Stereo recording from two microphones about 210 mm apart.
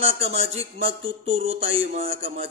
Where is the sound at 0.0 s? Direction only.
30° right (ahead or behind).